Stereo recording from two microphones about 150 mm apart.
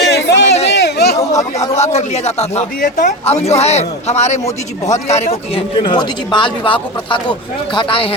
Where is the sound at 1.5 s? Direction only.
45° left (ahead or behind).